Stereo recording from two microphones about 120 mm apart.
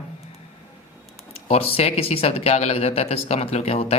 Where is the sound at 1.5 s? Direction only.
60° left (ahead or behind).